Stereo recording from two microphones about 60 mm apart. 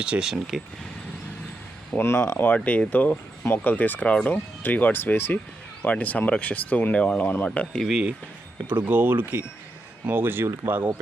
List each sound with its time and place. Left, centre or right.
0.0 s speech: centre
0.3 s speech: centre
2.0 s speech: left
4.6 s speech: left
7.9 s speech: centre
8.6 s speech: right